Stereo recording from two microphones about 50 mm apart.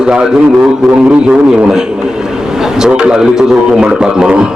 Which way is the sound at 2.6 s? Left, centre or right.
Centre.